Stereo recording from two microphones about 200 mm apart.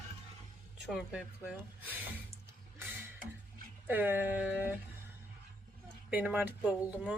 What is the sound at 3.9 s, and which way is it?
Speech, 10° right (ahead or behind).